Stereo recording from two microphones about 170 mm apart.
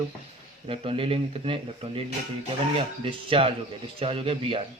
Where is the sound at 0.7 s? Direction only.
30° right (ahead or behind).